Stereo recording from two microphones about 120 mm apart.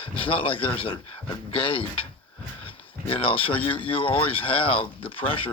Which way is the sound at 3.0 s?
50° left (ahead or behind).